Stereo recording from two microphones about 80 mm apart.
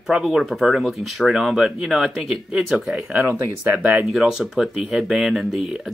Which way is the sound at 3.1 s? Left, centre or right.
Right.